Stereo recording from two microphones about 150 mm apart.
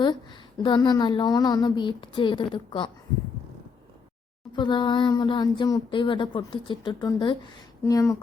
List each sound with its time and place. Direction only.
0.0 s a woman's voice: 30° left (ahead or behind)
4.5 s a woman's voice: 30° left (ahead or behind)